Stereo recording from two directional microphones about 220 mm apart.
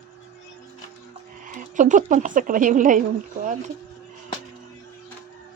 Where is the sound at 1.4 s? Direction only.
35° right (ahead or behind).